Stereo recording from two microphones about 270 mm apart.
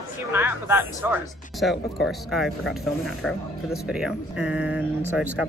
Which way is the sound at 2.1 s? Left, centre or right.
Centre.